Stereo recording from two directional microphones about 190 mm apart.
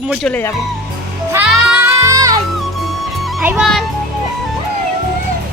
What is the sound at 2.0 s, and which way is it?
Music, 20° right (ahead or behind).